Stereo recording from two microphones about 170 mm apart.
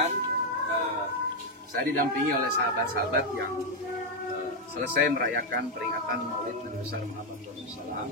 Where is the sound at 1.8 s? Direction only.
65° right (ahead or behind).